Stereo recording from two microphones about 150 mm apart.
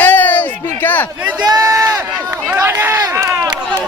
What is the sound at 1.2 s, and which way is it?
Speech, 10° right (ahead or behind).